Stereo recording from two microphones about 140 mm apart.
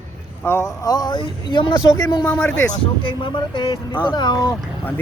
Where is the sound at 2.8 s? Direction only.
35° left (ahead or behind).